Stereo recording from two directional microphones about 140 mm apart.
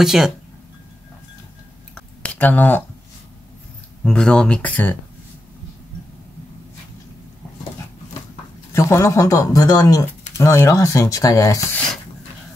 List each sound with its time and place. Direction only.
0.0 s speech: 5° right (ahead or behind)
2.0 s a sound: 10° left (ahead or behind)
4.0 s speech: 5° left (ahead or behind)
8.7 s speech: 20° left (ahead or behind)